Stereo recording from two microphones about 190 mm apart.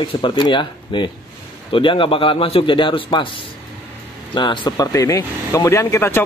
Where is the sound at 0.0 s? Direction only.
25° left (ahead or behind).